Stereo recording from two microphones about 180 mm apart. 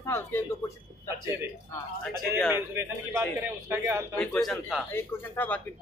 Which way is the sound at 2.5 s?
15° right (ahead or behind).